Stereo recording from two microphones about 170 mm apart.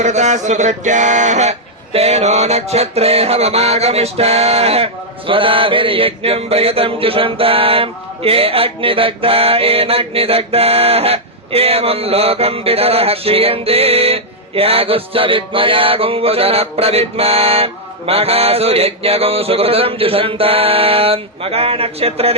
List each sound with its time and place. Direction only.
0.0 s music: 45° right (ahead or behind)